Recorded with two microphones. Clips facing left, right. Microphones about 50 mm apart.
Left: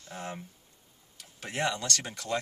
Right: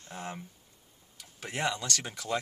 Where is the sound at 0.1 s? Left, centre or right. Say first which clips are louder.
Left 1 dB; centre.